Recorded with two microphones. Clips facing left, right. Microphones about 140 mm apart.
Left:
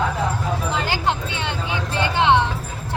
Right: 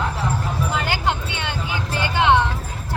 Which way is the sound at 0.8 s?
30° left (ahead or behind).